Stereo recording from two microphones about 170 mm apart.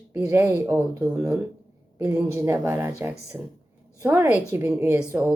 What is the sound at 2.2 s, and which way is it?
Speech, 15° right (ahead or behind).